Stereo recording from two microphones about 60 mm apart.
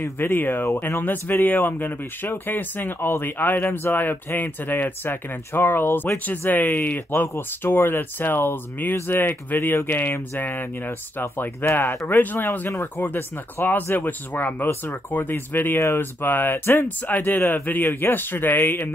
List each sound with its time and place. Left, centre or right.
0.0 s speech: left
11.1 s speech: left